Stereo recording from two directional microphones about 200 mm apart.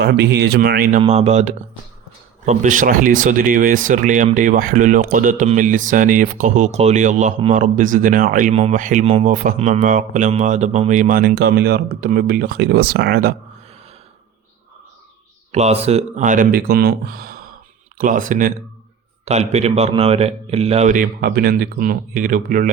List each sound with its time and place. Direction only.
0.0 s speech: 55° right (ahead or behind)
15.5 s speech: 30° right (ahead or behind)